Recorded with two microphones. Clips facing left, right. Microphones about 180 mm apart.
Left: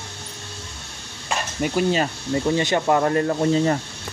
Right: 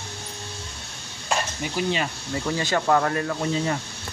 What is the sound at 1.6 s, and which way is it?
Speech, 45° left (ahead or behind).